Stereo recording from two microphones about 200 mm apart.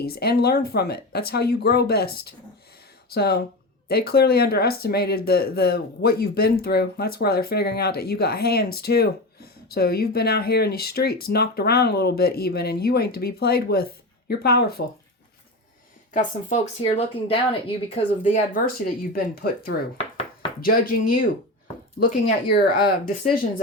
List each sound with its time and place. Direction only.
0.0 s speech: 50° left (ahead or behind)
16.1 s speech: 35° left (ahead or behind)
18.2 s speech: 40° left (ahead or behind)
22.3 s speech: 45° left (ahead or behind)